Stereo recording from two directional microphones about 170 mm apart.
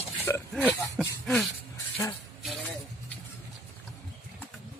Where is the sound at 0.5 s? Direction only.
10° right (ahead or behind).